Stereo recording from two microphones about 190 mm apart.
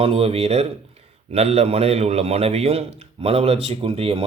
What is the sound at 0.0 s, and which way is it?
A man's voice, 30° right (ahead or behind).